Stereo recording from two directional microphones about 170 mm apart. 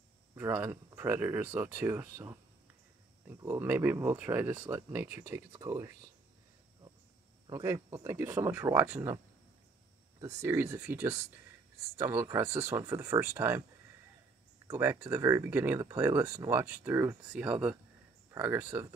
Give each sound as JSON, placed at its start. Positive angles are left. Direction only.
{"t": 0.4, "sound": "speech", "side_deg": -15}
{"t": 7.4, "sound": "speech", "side_deg": -20}
{"t": 10.2, "sound": "speech", "side_deg": -15}
{"t": 14.7, "sound": "speech", "side_deg": -15}